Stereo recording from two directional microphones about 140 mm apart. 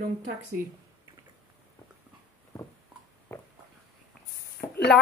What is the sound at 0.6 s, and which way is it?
Speech, 90° right.